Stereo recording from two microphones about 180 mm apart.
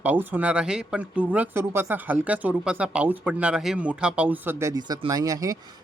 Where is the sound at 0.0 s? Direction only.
10° right (ahead or behind).